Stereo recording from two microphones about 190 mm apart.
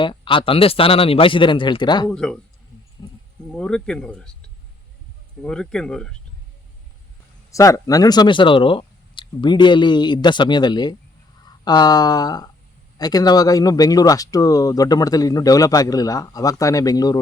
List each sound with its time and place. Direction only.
0.0 s speech: 25° left (ahead or behind)
2.0 s speech: 5° left (ahead or behind)
3.0 s speech: 20° left (ahead or behind)
3.5 s speech: 5° left (ahead or behind)
5.4 s speech: 5° left (ahead or behind)
7.5 s speech: 15° left (ahead or behind)